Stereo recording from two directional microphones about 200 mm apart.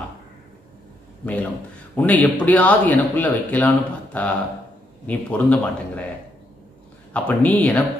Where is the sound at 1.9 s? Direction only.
10° left (ahead or behind).